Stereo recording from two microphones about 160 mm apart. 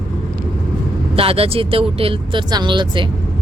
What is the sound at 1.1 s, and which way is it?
Speech, 35° right (ahead or behind).